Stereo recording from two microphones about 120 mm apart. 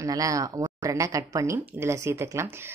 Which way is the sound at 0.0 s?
30° right (ahead or behind).